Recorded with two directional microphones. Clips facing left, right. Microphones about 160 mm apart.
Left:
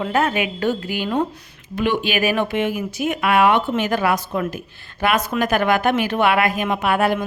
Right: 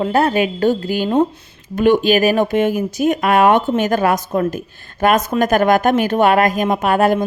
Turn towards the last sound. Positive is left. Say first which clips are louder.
# right 4 dB
turn(degrees=-40)  # may be behind; listen again after turning